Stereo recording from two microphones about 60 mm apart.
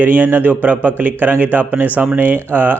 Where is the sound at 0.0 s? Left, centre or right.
Right.